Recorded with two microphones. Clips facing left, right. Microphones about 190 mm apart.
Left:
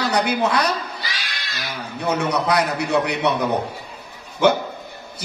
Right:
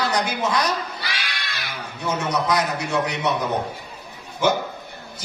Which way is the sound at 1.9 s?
65° left (ahead or behind).